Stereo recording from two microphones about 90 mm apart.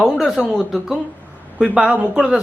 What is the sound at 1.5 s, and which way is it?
Speech, 10° right (ahead or behind).